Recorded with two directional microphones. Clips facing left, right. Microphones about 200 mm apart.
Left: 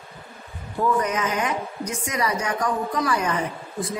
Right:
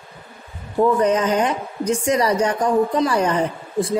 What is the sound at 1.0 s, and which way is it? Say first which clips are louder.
A woman's voice: right 7 dB; 30° right (ahead or behind).